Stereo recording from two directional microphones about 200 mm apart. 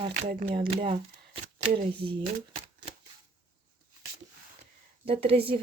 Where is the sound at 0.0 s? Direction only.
35° right (ahead or behind).